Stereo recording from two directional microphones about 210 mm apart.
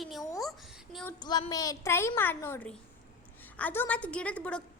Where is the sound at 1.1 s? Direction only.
20° left (ahead or behind).